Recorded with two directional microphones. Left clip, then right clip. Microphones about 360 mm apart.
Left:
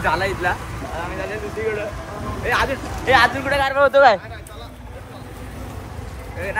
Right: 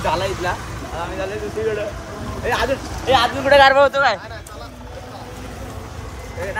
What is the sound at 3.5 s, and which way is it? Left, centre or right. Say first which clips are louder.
Speech: right 9 dB; right.